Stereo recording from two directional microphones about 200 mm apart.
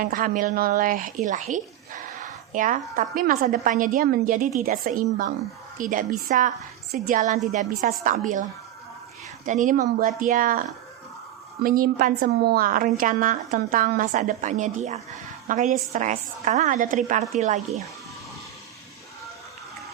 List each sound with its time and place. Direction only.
0.0 s a woman's voice: 45° right (ahead or behind)
9.5 s a woman's voice: 40° right (ahead or behind)